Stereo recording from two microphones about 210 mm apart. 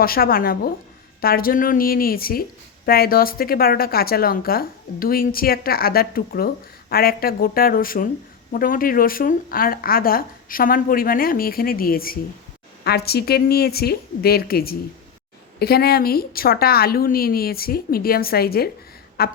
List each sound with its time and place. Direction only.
0.0 s speech: 45° left (ahead or behind)